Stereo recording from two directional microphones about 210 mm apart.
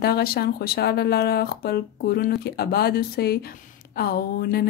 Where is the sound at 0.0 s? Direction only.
50° left (ahead or behind).